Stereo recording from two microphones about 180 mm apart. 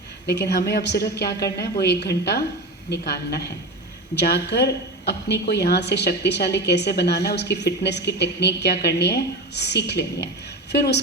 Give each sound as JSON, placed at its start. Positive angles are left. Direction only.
{"t": 0.3, "sound": "a woman's voice", "side_deg": 65}